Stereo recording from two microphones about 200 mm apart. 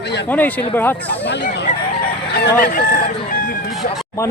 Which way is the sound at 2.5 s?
45° left (ahead or behind).